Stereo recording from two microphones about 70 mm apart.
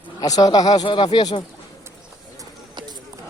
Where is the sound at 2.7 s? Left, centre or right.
Right.